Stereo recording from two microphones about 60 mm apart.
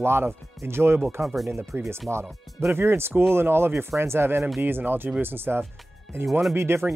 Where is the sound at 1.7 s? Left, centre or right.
Right.